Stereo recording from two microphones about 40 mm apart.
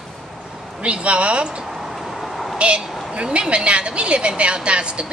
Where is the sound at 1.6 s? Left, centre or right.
Centre.